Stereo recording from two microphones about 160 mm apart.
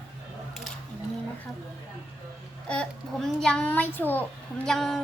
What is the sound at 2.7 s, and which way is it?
A child's voice, 5° left (ahead or behind).